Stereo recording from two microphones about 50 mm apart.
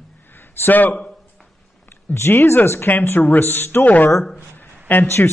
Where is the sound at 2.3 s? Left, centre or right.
Left.